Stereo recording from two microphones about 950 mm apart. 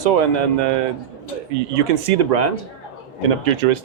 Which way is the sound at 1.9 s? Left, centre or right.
Right.